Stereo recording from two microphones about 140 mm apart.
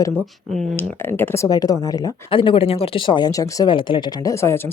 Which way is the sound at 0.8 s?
15° left (ahead or behind).